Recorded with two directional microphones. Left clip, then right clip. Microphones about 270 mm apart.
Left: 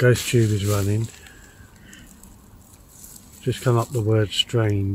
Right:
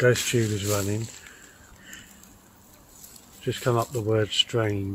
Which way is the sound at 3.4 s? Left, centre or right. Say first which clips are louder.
Left 2 dB; centre.